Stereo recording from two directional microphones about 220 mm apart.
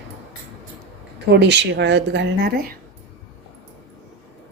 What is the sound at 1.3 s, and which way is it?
Speech, 50° right (ahead or behind).